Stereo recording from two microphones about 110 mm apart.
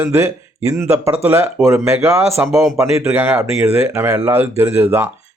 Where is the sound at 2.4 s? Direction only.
Centre (ahead or behind).